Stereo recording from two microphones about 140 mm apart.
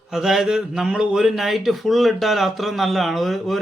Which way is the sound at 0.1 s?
Centre (ahead or behind).